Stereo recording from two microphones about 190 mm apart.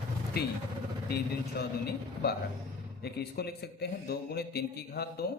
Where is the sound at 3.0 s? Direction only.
60° left (ahead or behind).